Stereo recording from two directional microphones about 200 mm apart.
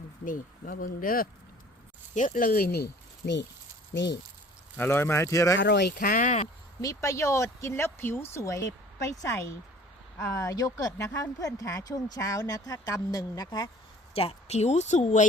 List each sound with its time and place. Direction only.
0.3 s speech: 45° left (ahead or behind); by 4.2 s 60° left (ahead or behind)
4.8 s speech: 10° left (ahead or behind)
5.5 s speech: 60° left (ahead or behind); by 6.5 s 35° left (ahead or behind)
6.8 s speech: 15° left (ahead or behind)
14.2 s speech: 30° left (ahead or behind)